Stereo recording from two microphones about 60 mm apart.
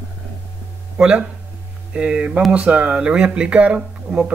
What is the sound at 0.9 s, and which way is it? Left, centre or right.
Speech, centre.